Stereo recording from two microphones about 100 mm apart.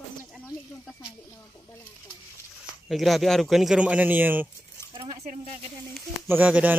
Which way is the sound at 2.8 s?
Centre (ahead or behind).